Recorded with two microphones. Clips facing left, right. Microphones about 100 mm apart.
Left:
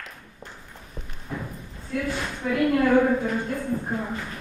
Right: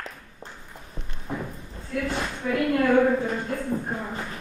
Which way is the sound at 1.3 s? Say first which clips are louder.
Right 2 dB; 20° right (ahead or behind).